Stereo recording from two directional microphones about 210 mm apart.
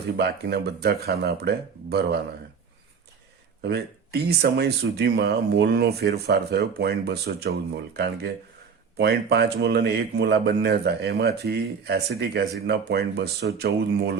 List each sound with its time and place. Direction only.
0.2 s speech: 50° right (ahead or behind)
3.6 s speech: 50° right (ahead or behind)